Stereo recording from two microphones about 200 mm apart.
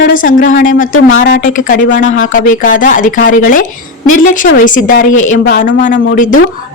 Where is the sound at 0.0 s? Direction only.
45° left (ahead or behind).